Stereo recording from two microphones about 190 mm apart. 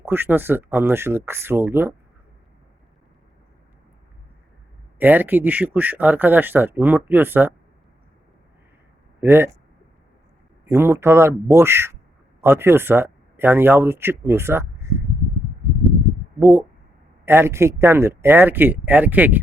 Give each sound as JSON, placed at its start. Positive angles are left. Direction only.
{"t": 0.0, "sound": "speech", "side_deg": -10}
{"t": 4.9, "sound": "speech", "side_deg": -10}
{"t": 9.2, "sound": "speech", "side_deg": -10}
{"t": 10.7, "sound": "speech", "side_deg": -15}
{"t": 16.4, "sound": "speech", "side_deg": -10}